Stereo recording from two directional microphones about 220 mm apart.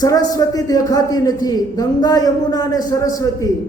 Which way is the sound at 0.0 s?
15° left (ahead or behind).